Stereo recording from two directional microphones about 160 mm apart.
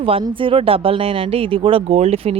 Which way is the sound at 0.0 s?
35° right (ahead or behind).